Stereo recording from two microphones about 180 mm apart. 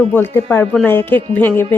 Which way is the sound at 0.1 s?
10° left (ahead or behind).